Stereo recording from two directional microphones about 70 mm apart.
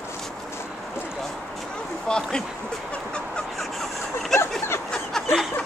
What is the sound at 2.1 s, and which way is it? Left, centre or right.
Speech, centre.